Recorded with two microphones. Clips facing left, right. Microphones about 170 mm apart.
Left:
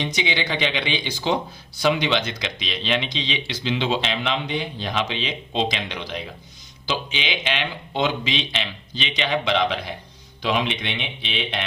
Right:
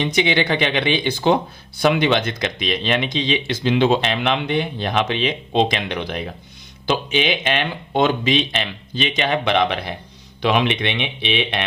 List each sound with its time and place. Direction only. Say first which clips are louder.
0.0 s speech: right 7 dB; 60° right (ahead or behind)